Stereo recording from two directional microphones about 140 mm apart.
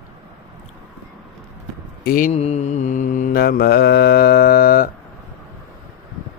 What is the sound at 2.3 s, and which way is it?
Mantra, 50° left (ahead or behind).